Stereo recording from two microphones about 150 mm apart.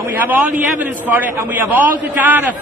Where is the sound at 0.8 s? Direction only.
10° right (ahead or behind).